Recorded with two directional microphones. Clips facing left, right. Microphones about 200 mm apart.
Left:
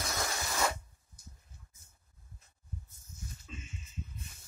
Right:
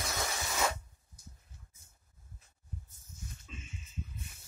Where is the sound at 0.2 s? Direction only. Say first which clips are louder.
Even; 5° right (ahead or behind).